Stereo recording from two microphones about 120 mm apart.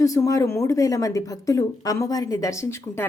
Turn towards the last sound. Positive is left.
turn(degrees=25)  # may be behind; listen again after turning